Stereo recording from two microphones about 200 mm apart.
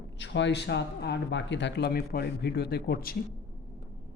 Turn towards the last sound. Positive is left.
turn(degrees=50)  # may be behind; listen again after turning